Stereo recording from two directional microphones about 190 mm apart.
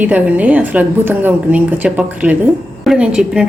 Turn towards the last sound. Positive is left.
turn(degrees=-5)  # may be behind; listen again after turning